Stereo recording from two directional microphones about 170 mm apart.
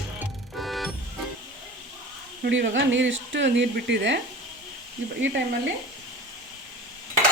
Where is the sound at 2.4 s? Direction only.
90° right.